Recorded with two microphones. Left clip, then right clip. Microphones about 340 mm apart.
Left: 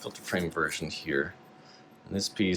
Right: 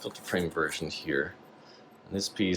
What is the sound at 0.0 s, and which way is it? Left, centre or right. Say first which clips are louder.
Speech: right 1 dB; centre.